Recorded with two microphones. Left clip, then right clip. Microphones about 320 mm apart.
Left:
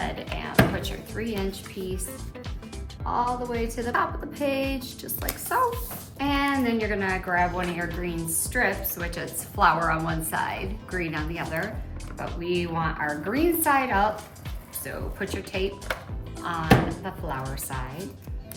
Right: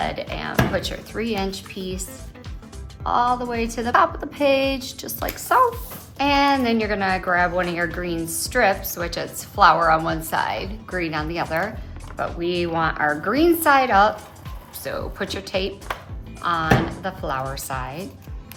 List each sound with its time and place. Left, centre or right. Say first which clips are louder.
0.0 s music: right 6 dB; centre
0.8 s a woman's voice: right 6 dB; centre
3.1 s a woman's voice: right 6 dB; right